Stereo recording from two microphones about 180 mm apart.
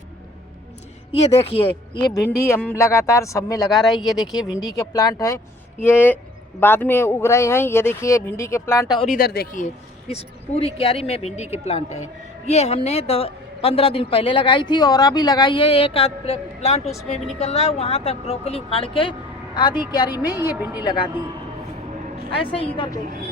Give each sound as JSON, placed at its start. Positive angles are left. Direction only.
{"t": 1.1, "sound": "speech", "side_deg": 35}
{"t": 2.4, "sound": "a man's voice", "side_deg": 10}
{"t": 3.8, "sound": "speech", "side_deg": 0}
{"t": 4.8, "sound": "a man's voice", "side_deg": 20}
{"t": 9.1, "sound": "speech", "side_deg": 60}
{"t": 10.1, "sound": "speech", "side_deg": 35}
{"t": 22.5, "sound": "speech", "side_deg": 30}